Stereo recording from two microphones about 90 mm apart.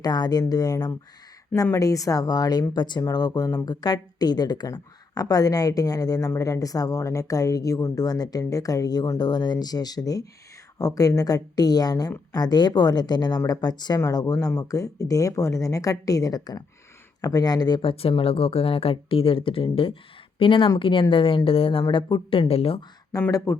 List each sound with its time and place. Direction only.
0.0 s a woman's voice: 50° left (ahead or behind); by 7.9 s 35° left (ahead or behind)
7.9 s a woman's voice: 45° left (ahead or behind)
17.8 s a woman's voice: 85° left
21.9 s speech: 75° left (ahead or behind); by 22.8 s 90° left
23.1 s a woman's voice: 40° left (ahead or behind)